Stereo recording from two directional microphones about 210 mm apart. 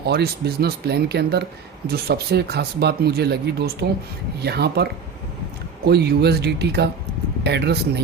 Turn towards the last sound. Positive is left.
turn(degrees=-50)  # may be behind; listen again after turning